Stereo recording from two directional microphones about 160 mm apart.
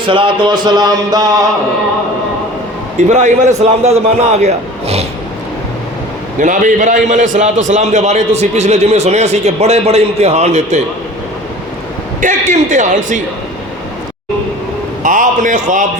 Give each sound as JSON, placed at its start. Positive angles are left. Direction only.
{"t": 0.0, "sound": "music", "side_deg": -30}
{"t": 3.1, "sound": "a man's voice", "side_deg": -50}
{"t": 6.4, "sound": "a man's voice", "side_deg": -55}
{"t": 12.2, "sound": "a man's voice", "side_deg": -50}
{"t": 15.0, "sound": "a man's voice", "side_deg": -55}